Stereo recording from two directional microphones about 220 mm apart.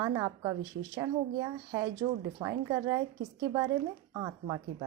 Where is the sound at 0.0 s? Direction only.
15° right (ahead or behind).